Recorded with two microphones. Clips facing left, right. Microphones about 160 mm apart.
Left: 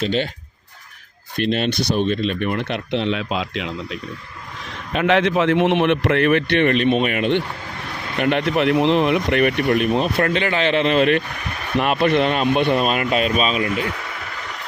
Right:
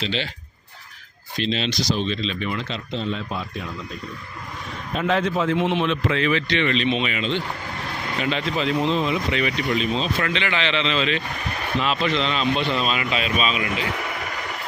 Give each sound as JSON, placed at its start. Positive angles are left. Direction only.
{"t": 0.0, "sound": "speech", "side_deg": 45}
{"t": 1.4, "sound": "speech", "side_deg": 55}
{"t": 4.9, "sound": "speech", "side_deg": 75}